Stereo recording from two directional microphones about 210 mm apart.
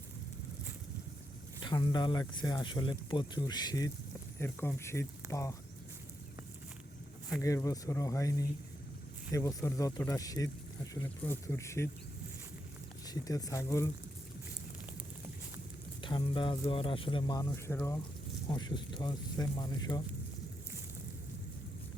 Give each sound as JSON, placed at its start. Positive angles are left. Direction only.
{"t": 1.6, "sound": "speech", "side_deg": 20}
{"t": 7.4, "sound": "speech", "side_deg": 15}
{"t": 13.1, "sound": "speech", "side_deg": 15}
{"t": 16.0, "sound": "speech", "side_deg": 25}